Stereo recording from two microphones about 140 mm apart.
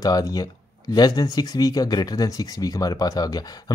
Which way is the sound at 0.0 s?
25° left (ahead or behind).